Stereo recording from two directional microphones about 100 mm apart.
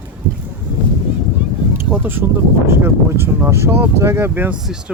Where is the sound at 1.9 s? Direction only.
20° right (ahead or behind).